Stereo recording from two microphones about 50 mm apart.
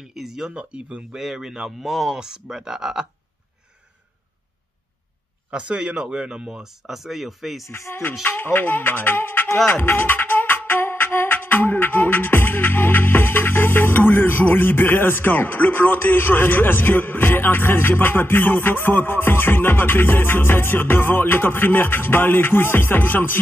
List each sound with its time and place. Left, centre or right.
0.0 s speech: centre
5.5 s speech: right; by 7.7 s centre
7.7 s music: left